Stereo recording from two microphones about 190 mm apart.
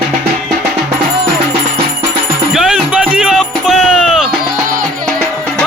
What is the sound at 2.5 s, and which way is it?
Music, 5° right (ahead or behind).